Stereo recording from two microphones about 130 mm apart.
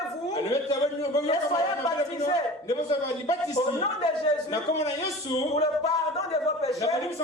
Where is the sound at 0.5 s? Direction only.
30° left (ahead or behind).